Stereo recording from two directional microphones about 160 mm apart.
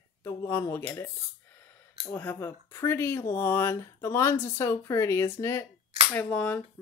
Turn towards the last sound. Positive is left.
turn(degrees=10)  # may be behind; listen again after turning